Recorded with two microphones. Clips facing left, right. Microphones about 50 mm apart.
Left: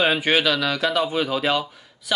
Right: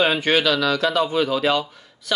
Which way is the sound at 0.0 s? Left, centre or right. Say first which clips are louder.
Right 1 dB; centre.